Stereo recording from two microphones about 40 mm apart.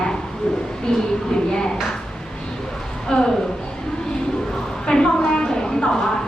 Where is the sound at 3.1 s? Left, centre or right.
Left.